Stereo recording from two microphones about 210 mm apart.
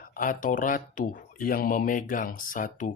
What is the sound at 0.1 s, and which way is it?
Speech, 40° left (ahead or behind).